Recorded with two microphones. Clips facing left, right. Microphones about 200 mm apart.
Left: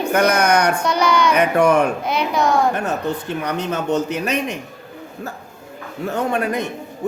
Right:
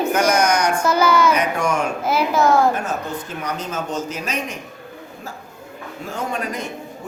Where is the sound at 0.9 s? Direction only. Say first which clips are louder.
Right 1 dB; 5° right (ahead or behind).